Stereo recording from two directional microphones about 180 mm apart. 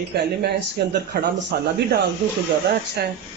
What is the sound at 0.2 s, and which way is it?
A man's voice, 65° right (ahead or behind).